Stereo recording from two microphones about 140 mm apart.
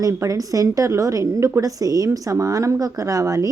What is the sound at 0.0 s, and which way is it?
A woman's voice, 25° right (ahead or behind).